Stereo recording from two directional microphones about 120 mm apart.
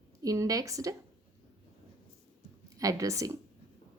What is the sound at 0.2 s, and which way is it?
Speech, 30° right (ahead or behind).